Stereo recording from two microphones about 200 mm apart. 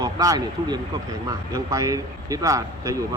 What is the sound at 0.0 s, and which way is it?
Speech, 15° right (ahead or behind).